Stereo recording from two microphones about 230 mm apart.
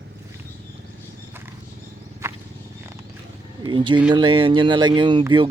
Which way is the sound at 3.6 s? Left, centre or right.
Right.